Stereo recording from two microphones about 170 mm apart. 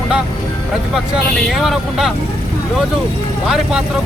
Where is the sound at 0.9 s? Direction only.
Centre (ahead or behind).